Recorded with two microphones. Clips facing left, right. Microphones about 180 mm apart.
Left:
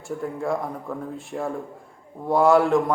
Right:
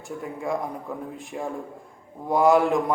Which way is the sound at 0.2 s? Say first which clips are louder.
Left 1 dB; centre (ahead or behind).